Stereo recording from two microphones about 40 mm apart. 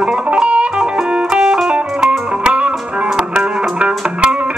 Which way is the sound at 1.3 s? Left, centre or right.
Centre.